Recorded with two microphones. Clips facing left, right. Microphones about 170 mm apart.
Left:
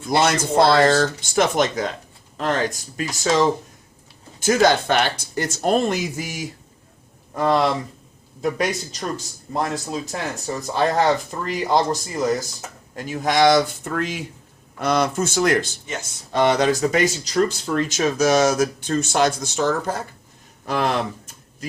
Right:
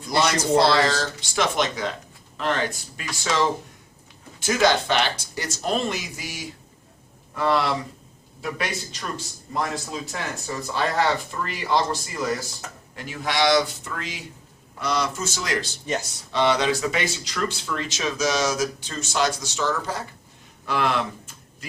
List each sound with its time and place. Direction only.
0.1 s speech: 50° left (ahead or behind)
4.4 s speech: 45° left (ahead or behind)